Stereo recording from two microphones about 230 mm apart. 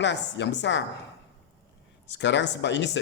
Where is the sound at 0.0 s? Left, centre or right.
Left.